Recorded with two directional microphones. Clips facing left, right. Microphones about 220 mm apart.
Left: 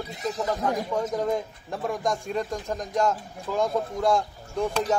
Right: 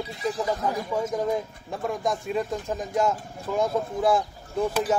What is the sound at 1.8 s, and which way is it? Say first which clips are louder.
Speech: even; centre (ahead or behind).